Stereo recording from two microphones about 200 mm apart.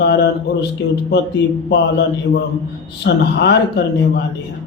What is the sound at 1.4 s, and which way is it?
Mantra, 60° left (ahead or behind).